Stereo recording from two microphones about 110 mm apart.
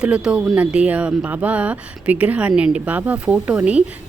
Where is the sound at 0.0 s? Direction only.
10° right (ahead or behind).